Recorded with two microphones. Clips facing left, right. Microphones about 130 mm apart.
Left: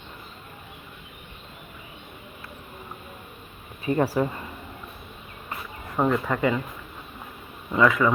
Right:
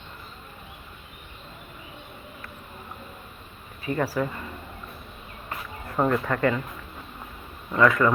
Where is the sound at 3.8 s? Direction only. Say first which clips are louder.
Left 3 dB; 25° left (ahead or behind).